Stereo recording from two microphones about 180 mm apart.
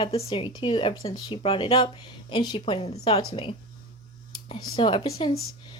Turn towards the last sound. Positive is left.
turn(degrees=20)  # may be behind; listen again after turning